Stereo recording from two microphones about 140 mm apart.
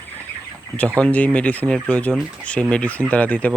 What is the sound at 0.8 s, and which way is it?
Speech, 10° left (ahead or behind).